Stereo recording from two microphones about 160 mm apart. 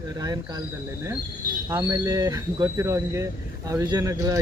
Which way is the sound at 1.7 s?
20° right (ahead or behind).